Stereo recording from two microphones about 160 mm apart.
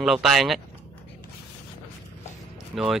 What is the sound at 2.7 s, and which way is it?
Speech, 5° right (ahead or behind).